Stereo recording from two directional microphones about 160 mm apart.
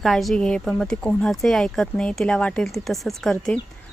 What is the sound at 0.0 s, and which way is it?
Speech, centre (ahead or behind).